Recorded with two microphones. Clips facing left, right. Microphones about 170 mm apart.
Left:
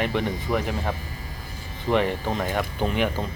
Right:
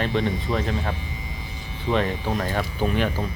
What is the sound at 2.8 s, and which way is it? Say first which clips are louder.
Speech: right 1 dB; 15° left (ahead or behind).